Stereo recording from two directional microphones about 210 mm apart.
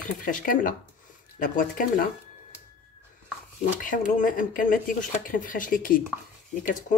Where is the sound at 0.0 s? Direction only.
40° left (ahead or behind).